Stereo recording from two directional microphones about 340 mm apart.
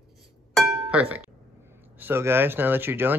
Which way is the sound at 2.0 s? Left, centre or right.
Centre.